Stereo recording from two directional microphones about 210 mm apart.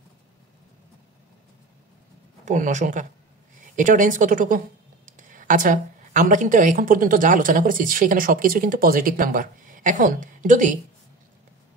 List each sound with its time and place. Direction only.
2.4 s a woman's voice: 35° right (ahead or behind)